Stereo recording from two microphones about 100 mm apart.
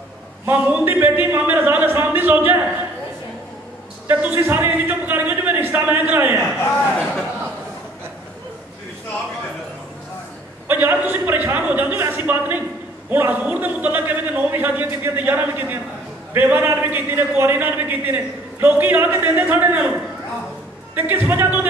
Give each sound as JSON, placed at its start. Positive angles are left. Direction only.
{"t": 0.5, "sound": "speech", "side_deg": -15}
{"t": 4.1, "sound": "a man's voice", "side_deg": -20}
{"t": 10.7, "sound": "a sound", "side_deg": -20}
{"t": 13.1, "sound": "a man's voice", "side_deg": -15}